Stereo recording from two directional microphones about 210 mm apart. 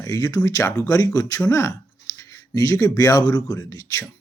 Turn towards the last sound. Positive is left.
turn(degrees=15)  # may be behind; listen again after turning